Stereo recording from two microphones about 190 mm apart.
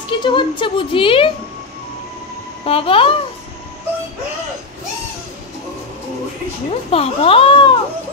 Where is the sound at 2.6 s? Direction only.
30° left (ahead or behind).